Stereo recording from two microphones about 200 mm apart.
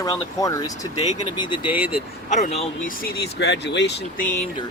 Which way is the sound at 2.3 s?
35° left (ahead or behind).